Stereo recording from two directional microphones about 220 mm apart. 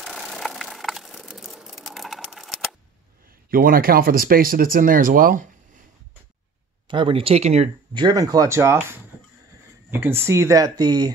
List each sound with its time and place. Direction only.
0.0 s a sound: centre (ahead or behind)
3.3 s speech: 40° right (ahead or behind)
6.9 s speech: 20° right (ahead or behind)